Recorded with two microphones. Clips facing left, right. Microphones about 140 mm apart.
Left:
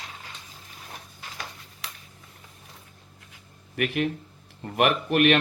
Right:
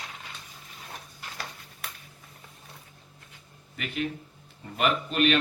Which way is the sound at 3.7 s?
60° left (ahead or behind).